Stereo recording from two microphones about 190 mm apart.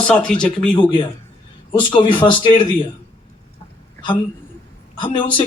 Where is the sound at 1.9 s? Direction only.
25° left (ahead or behind).